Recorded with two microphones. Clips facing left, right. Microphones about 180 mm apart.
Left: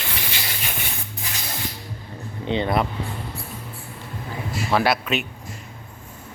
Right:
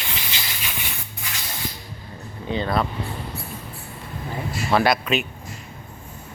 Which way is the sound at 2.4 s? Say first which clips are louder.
Left 1 dB; 20° left (ahead or behind).